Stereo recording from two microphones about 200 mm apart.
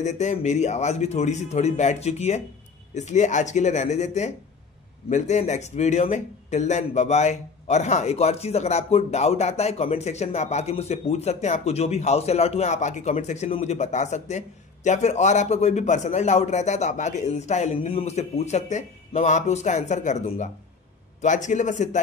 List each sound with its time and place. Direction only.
0.0 s speech: 35° left (ahead or behind)